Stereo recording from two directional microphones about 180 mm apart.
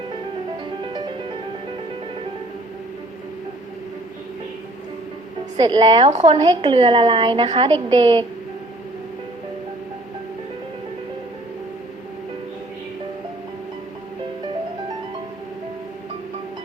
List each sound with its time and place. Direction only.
5.5 s a woman's voice: 25° right (ahead or behind)